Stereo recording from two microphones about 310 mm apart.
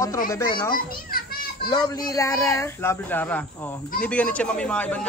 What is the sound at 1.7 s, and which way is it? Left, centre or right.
Speech, centre.